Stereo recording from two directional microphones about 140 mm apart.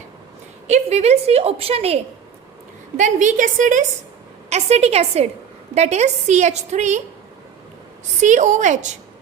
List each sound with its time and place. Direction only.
0.7 s a woman's voice: 50° right (ahead or behind)
3.0 s a woman's voice: 65° right (ahead or behind)
4.4 s a woman's voice: 50° right (ahead or behind)
8.2 s a woman's voice: 60° right (ahead or behind)